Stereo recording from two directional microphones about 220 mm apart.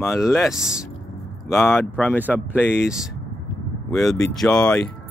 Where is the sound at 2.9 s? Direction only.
Centre (ahead or behind).